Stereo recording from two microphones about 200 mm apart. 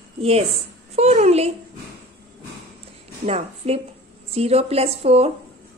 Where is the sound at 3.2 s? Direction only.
30° right (ahead or behind).